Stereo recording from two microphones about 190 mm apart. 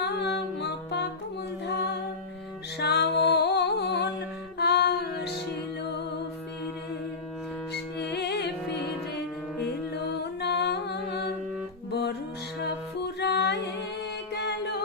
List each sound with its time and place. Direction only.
0.3 s music: 60° left (ahead or behind)
2.7 s music: 60° left (ahead or behind)
8.1 s music: 60° left (ahead or behind)
10.4 s music: 60° left (ahead or behind)
13.1 s music: 60° left (ahead or behind)